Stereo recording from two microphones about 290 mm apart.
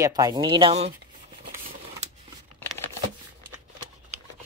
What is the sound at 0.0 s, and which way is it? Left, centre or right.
Speech, centre.